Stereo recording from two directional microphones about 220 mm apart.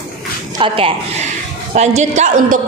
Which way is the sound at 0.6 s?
25° right (ahead or behind).